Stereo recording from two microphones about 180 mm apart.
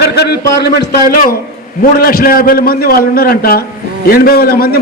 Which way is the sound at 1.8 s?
55° left (ahead or behind).